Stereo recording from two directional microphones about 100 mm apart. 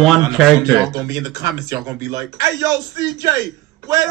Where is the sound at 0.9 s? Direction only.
30° right (ahead or behind).